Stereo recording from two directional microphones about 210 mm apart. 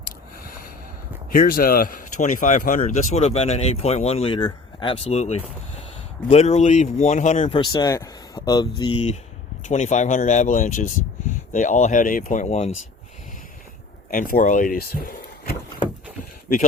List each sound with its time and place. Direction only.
1.3 s speech: 40° left (ahead or behind)
14.1 s speech: 40° left (ahead or behind)